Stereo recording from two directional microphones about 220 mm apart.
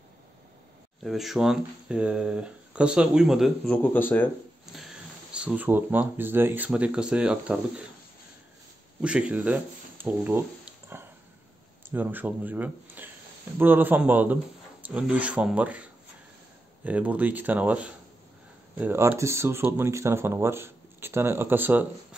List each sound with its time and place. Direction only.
1.0 s speech: centre (ahead or behind)
4.7 s a sound: centre (ahead or behind)
5.3 s speech: 5° right (ahead or behind)
9.0 s speech: 5° right (ahead or behind)